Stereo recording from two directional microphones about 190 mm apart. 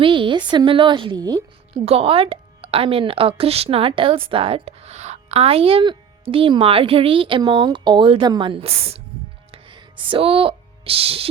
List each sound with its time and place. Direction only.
0.0 s a woman's voice: 25° right (ahead or behind)
1.8 s a woman's voice: 30° right (ahead or behind)
9.5 s music: 25° right (ahead or behind)